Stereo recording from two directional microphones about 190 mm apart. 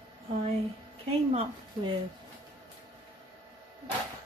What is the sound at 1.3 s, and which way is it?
Speech, 30° right (ahead or behind).